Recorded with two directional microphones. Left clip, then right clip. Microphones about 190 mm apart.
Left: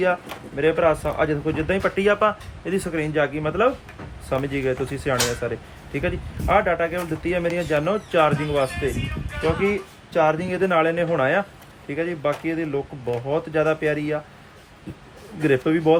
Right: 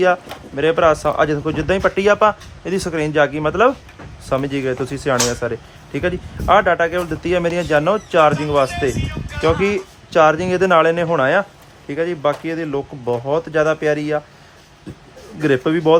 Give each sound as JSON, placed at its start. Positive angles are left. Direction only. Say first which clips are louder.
{"t": 0.0, "sound": "speech", "louder": "right 6 dB", "side_deg": -20}
{"t": 9.4, "sound": "speech", "louder": "right 5 dB", "side_deg": -30}
{"t": 15.4, "sound": "speech", "louder": "right 3 dB", "side_deg": -15}